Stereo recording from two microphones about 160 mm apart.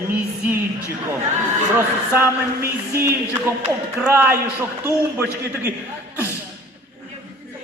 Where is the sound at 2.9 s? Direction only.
15° right (ahead or behind).